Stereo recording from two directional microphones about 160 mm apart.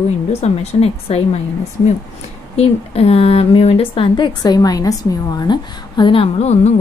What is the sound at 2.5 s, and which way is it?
A woman's voice, 40° left (ahead or behind).